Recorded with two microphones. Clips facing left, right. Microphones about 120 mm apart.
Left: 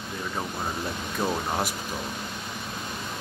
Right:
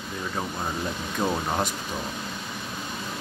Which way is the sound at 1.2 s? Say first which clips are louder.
Right 1 dB; 5° left (ahead or behind).